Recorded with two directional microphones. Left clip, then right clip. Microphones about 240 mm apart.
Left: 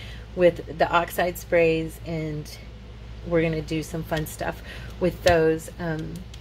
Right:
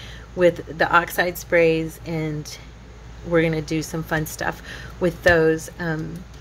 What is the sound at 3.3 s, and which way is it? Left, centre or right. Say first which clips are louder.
A woman's voice: right 4 dB; centre.